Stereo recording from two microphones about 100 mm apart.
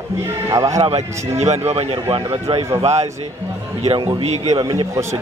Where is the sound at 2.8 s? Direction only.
90° right.